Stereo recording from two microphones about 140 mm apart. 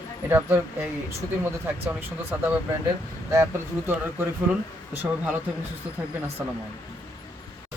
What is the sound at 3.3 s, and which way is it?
Speech, 20° right (ahead or behind).